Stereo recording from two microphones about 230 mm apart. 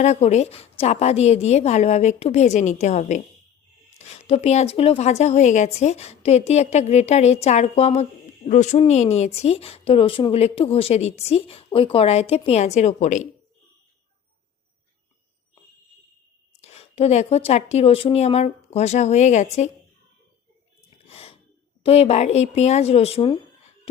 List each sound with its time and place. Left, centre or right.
0.0 s speech: left
16.6 s speech: left
21.1 s sneeze: left
21.8 s speech: left